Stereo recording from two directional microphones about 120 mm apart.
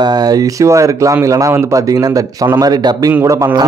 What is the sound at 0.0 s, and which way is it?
A man's voice, 30° right (ahead or behind).